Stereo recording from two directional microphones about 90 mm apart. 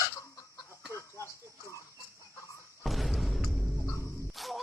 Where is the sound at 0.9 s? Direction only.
35° left (ahead or behind).